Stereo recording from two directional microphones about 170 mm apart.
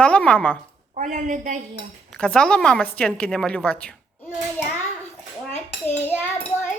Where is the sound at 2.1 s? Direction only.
5° left (ahead or behind).